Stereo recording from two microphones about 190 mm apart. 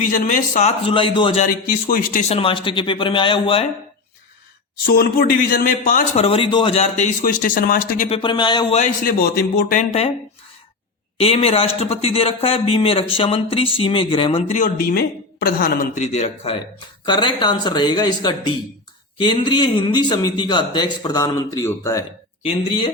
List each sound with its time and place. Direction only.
0.0 s a man's voice: 45° left (ahead or behind)
0.9 s speech: 25° left (ahead or behind)
1.5 s a man's voice: 50° left (ahead or behind)
2.3 s speech: 30° left (ahead or behind)
4.9 s a man's voice: 50° left (ahead or behind)
6.2 s a man's voice: 30° left (ahead or behind); by 8.0 s 50° left (ahead or behind)
8.0 s speech: 30° left (ahead or behind)
8.8 s a man's voice: 50° left (ahead or behind)
11.2 s speech: 30° left (ahead or behind)
14.6 s a man's voice: 55° left (ahead or behind); by 22.0 s 15° left (ahead or behind)